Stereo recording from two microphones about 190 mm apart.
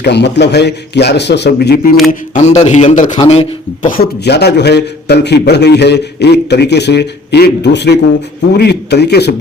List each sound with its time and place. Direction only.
0.0 s a man's voice: 65° left (ahead or behind)
2.0 s a man's voice: 40° left (ahead or behind)
3.8 s a man's voice: 50° left (ahead or behind)